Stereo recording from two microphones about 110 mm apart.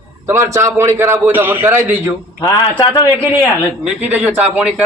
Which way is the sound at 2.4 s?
40° left (ahead or behind).